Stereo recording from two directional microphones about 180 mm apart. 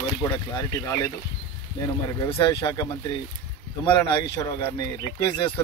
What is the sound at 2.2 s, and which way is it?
Speech, 25° left (ahead or behind).